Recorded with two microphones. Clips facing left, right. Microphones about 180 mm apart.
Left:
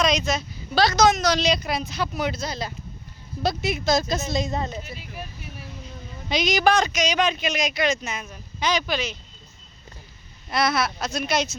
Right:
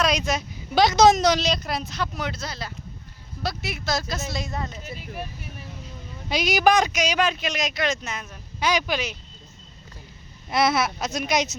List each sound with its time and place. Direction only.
0.0 s a sound: 10° right (ahead or behind)
1.4 s a woman's voice: centre (ahead or behind); by 4.7 s 20° left (ahead or behind)
6.2 s a man's voice: 10° right (ahead or behind)
8.6 s speech: 10° right (ahead or behind)
10.5 s speech: 25° right (ahead or behind)